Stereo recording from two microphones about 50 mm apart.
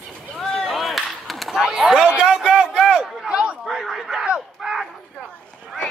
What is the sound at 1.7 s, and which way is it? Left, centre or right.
Speech, centre.